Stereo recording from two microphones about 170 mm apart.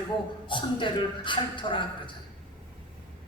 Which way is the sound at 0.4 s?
30° left (ahead or behind).